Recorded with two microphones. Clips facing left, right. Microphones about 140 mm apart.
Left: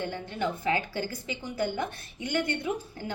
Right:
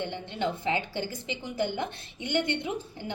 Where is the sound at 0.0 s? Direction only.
20° right (ahead or behind).